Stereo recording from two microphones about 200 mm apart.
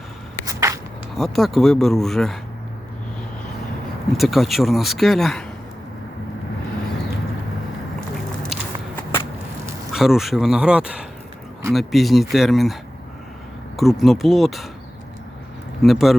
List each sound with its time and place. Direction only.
0.4 s a sound: 15° right (ahead or behind)
1.1 s speech: centre (ahead or behind)
4.2 s speech: centre (ahead or behind)
8.5 s walk: centre (ahead or behind)
9.9 s speech: centre (ahead or behind)
13.7 s speech: centre (ahead or behind)
15.8 s speech: centre (ahead or behind)